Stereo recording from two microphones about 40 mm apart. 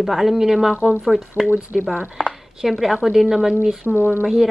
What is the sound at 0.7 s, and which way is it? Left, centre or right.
Speech, right.